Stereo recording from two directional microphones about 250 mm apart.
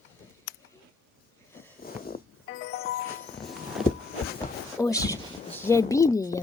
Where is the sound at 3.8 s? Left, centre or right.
Centre.